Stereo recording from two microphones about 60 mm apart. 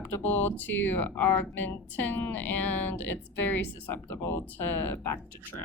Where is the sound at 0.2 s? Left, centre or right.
Left.